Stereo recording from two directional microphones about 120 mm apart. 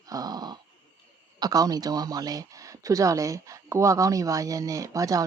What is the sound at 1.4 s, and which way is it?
Speech, 30° right (ahead or behind).